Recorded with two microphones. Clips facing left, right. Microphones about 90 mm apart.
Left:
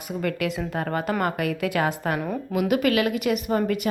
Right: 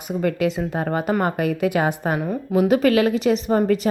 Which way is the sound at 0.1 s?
25° right (ahead or behind).